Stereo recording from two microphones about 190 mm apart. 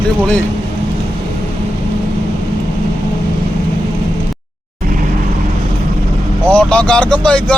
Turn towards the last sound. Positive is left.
turn(degrees=5)  # may be behind; listen again after turning